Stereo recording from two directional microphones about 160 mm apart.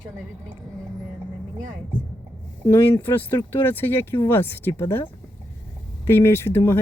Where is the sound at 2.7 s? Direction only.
20° left (ahead or behind).